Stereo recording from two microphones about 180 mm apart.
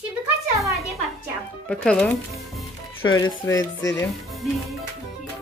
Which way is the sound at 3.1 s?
25° left (ahead or behind).